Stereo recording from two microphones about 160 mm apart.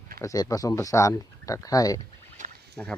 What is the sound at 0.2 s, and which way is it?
Speech, 20° left (ahead or behind).